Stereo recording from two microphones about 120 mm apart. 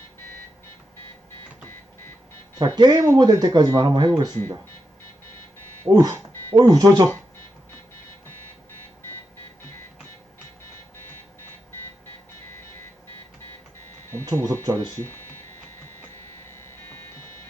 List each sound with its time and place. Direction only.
2.6 s speech: 35° right (ahead or behind)
5.8 s speech: 30° right (ahead or behind)
14.3 s speech: 25° right (ahead or behind)